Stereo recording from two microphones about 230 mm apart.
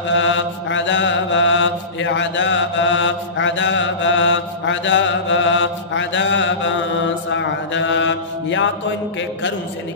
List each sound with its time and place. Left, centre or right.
0.1 s mantra: left